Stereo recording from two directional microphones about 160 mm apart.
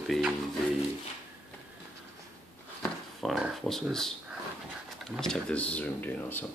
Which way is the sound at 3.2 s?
Centre (ahead or behind).